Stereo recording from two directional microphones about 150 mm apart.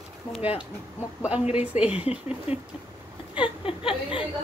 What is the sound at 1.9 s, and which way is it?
Speech, 45° left (ahead or behind).